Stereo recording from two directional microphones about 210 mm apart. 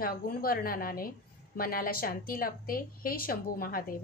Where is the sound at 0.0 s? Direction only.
45° left (ahead or behind).